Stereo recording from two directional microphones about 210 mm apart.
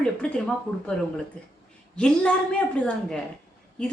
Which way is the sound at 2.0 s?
5° left (ahead or behind).